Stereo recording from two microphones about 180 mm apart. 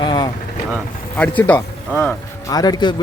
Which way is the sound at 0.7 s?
5° left (ahead or behind).